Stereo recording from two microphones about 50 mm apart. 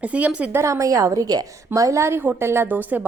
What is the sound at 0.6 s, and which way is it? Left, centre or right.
A woman's voice, right.